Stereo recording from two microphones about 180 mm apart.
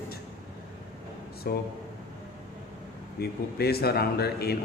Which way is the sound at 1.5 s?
60° left (ahead or behind).